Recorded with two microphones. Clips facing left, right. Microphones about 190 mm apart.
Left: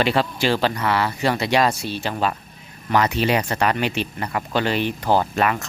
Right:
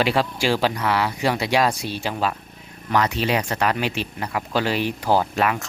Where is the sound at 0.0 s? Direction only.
5° right (ahead or behind).